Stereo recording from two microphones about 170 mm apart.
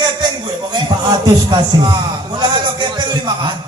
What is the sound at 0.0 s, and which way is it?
Music, 25° right (ahead or behind).